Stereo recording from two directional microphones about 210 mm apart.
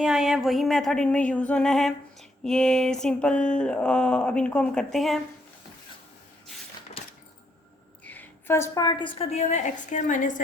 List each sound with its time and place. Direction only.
0.0 s speech: centre (ahead or behind)
8.0 s a woman's voice: 10° left (ahead or behind); by 10.4 s 40° left (ahead or behind)